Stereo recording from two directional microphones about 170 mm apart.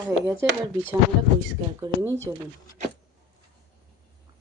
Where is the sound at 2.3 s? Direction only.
15° right (ahead or behind).